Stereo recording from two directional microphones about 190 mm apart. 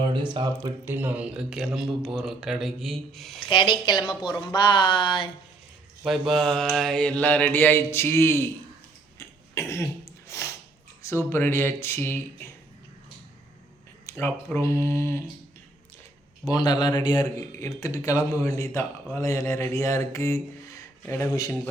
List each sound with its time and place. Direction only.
0.1 s speech: 25° right (ahead or behind)
0.9 s a man's voice: 10° right (ahead or behind)
3.5 s speech: 25° left (ahead or behind)
6.0 s a man's voice: centre (ahead or behind)
9.1 s throat clearing: 15° left (ahead or behind)
11.0 s a man's voice: 15° left (ahead or behind)
14.1 s a man's voice: 10° left (ahead or behind)
16.5 s a man's voice: 20° left (ahead or behind)